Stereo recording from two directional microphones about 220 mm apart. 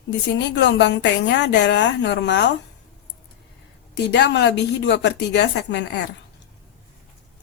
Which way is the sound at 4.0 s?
50° left (ahead or behind).